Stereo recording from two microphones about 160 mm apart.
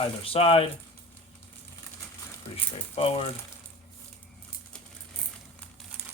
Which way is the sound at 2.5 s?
40° left (ahead or behind).